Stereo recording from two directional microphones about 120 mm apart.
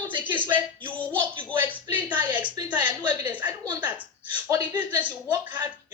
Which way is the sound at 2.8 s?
15° right (ahead or behind).